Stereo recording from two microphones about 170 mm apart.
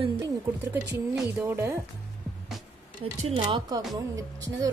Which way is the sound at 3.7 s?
20° right (ahead or behind).